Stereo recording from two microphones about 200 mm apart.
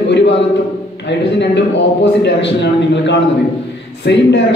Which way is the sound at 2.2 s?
60° left (ahead or behind).